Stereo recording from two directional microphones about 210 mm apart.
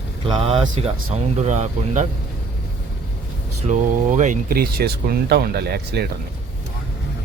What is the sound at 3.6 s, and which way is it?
Speech, 35° right (ahead or behind).